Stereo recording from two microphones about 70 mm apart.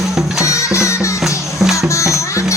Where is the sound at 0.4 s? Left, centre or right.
Left.